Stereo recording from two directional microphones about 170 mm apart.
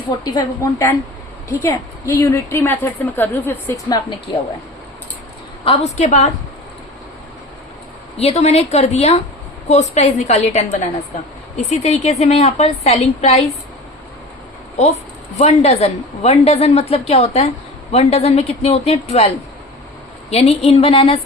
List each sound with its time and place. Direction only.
0.3 s a woman's voice: 20° left (ahead or behind)
5.6 s a woman's voice: 40° left (ahead or behind)
8.2 s a woman's voice: 40° left (ahead or behind)
15.4 s a woman's voice: 40° left (ahead or behind)
20.3 s a woman's voice: 40° left (ahead or behind)